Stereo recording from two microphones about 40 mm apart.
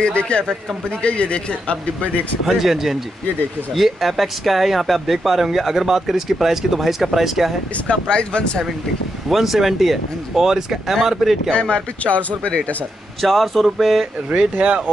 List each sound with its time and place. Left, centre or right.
0.0 s speech: left
2.4 s speech: centre
7.7 s speech: left
9.3 s speech: centre
11.0 s speech: centre
12.0 s speech: left
13.2 s speech: centre
14.3 s speech: right